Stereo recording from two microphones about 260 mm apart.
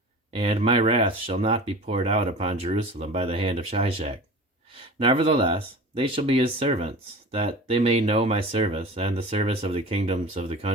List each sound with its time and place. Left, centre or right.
0.3 s speech: right